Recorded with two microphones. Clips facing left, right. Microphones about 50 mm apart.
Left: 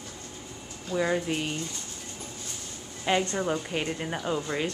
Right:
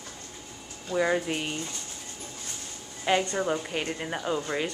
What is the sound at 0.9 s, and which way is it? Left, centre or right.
Speech, centre.